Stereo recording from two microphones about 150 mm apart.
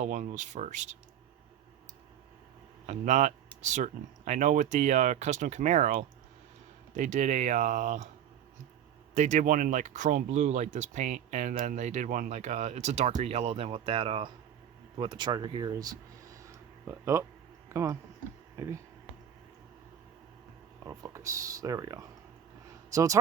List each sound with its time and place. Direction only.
0.0 s speech: 55° right (ahead or behind)
2.8 s speech: 50° right (ahead or behind)
9.1 s speech: 55° right (ahead or behind)
12.4 s speech: 45° right (ahead or behind); by 18.8 s 20° right (ahead or behind)
20.8 s speech: 20° right (ahead or behind)